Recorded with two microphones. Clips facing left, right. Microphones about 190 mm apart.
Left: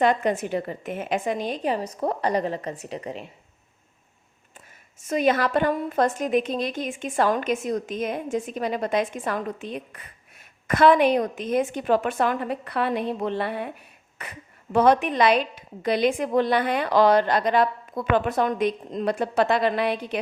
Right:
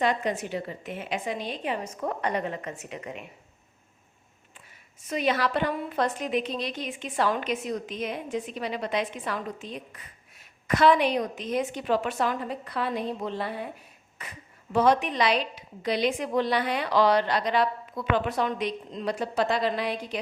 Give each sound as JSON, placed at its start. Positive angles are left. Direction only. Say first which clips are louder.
{"t": 0.0, "sound": "a woman's voice", "louder": "left 5 dB", "side_deg": 50}
{"t": 4.9, "sound": "a woman's voice", "louder": "left 5 dB", "side_deg": 45}